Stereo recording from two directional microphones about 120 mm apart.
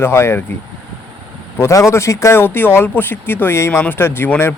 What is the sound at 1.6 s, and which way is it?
Speech, 25° left (ahead or behind).